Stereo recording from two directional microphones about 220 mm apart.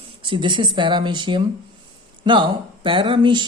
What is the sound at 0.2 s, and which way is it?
Speech, 20° right (ahead or behind).